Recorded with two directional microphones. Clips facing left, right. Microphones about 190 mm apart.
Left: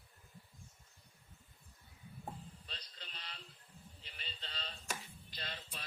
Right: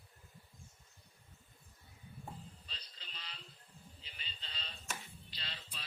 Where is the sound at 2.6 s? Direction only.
55° left (ahead or behind).